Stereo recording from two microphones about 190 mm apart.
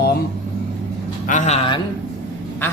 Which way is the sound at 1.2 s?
40° left (ahead or behind).